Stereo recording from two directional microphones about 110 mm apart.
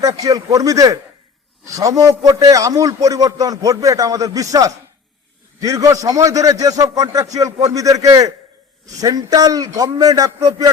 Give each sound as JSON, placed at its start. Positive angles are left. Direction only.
{"t": 0.0, "sound": "a man's voice", "side_deg": -35}